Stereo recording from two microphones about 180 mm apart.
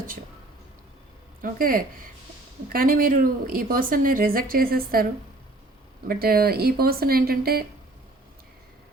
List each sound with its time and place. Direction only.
1.4 s a woman's voice: 50° right (ahead or behind)
6.1 s speech: 55° right (ahead or behind)